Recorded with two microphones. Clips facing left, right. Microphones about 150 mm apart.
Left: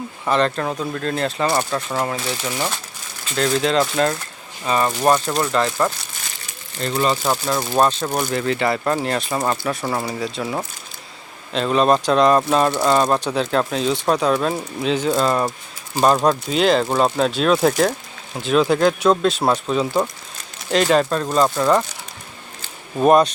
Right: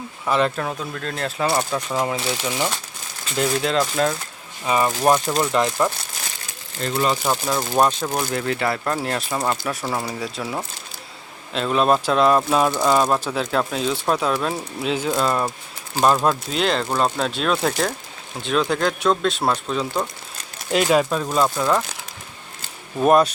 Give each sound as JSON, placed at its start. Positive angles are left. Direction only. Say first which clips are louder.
{"t": 0.3, "sound": "speech", "louder": "left 2 dB", "side_deg": -5}
{"t": 3.6, "sound": "speech", "louder": "left 3 dB", "side_deg": -5}
{"t": 6.8, "sound": "speech", "louder": "left 1 dB", "side_deg": -5}
{"t": 11.5, "sound": "speech", "louder": "left 2 dB", "side_deg": 0}
{"t": 20.7, "sound": "speech", "louder": "left 1 dB", "side_deg": -5}
{"t": 23.0, "sound": "speech", "louder": "left 2 dB", "side_deg": -5}